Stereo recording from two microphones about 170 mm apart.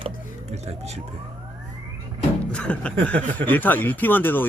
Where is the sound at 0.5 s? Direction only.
40° right (ahead or behind).